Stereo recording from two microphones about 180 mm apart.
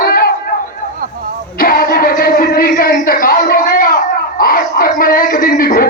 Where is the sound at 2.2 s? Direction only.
55° left (ahead or behind).